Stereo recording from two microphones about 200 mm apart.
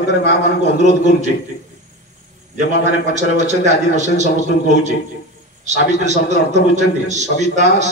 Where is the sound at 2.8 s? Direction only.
35° right (ahead or behind).